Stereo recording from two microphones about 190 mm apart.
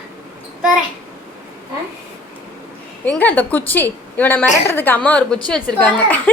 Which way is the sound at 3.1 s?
10° left (ahead or behind).